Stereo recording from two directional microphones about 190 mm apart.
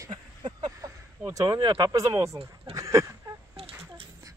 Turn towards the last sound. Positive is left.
turn(degrees=-15)  # may be behind; listen again after turning